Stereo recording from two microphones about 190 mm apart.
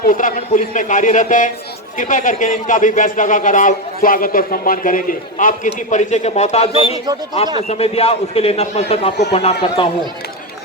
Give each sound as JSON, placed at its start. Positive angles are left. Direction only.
{"t": 0.0, "sound": "a man's voice", "side_deg": 45}